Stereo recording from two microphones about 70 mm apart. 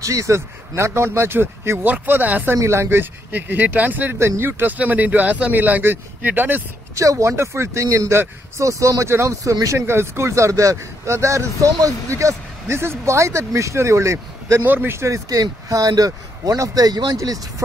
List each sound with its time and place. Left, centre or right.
0.0 s speech: right
2.5 s speech: right
7.0 s speech: right
14.6 s speech: right